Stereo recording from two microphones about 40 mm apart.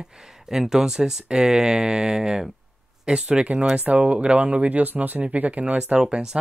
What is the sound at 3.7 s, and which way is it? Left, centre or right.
Speech, right.